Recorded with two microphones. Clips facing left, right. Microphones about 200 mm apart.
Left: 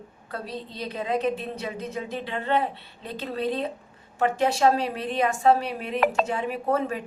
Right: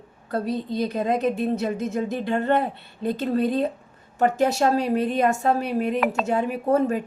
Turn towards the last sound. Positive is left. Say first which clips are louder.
# right 5 dB
turn(degrees=-45)  # may be behind; listen again after turning